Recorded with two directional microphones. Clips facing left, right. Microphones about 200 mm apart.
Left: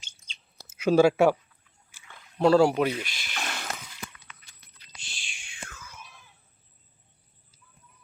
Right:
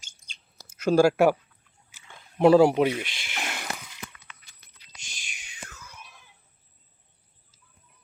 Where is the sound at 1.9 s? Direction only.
20° right (ahead or behind).